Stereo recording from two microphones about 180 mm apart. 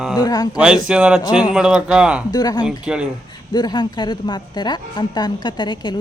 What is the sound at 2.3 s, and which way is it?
Speech, 20° left (ahead or behind).